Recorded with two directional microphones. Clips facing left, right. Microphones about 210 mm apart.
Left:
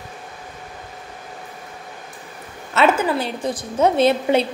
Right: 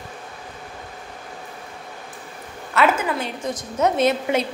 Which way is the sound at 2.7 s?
30° left (ahead or behind).